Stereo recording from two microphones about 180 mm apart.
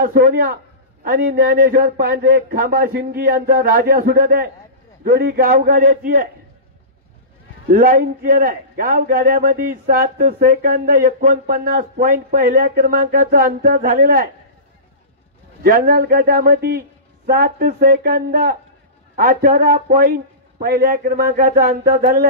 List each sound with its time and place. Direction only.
0.0 s a man's voice: 55° right (ahead or behind)
7.8 s a man's voice: 50° right (ahead or behind)
15.6 s a man's voice: 55° right (ahead or behind)